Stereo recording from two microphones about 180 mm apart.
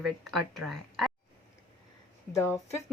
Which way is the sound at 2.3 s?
15° left (ahead or behind).